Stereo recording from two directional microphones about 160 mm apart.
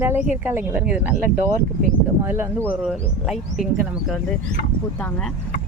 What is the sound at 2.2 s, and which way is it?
Speech, 15° right (ahead or behind).